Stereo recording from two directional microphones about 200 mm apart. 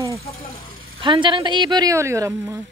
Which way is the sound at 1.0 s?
25° right (ahead or behind).